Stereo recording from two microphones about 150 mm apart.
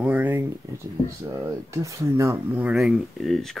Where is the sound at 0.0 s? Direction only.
10° right (ahead or behind).